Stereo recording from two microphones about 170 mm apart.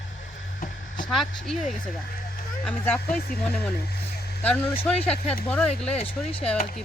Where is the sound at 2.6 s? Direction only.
5° left (ahead or behind).